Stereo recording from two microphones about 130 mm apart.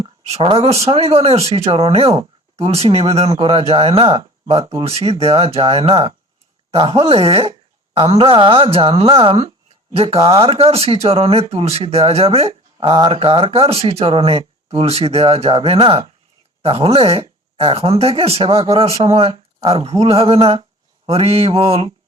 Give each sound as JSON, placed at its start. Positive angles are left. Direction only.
{"t": 0.3, "sound": "speech", "side_deg": -50}
{"t": 3.3, "sound": "speech", "side_deg": -40}
{"t": 19.3, "sound": "a sound", "side_deg": -35}
{"t": 19.7, "sound": "speech", "side_deg": -50}